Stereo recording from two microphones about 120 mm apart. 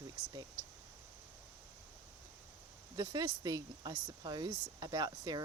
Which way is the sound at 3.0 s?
35° right (ahead or behind).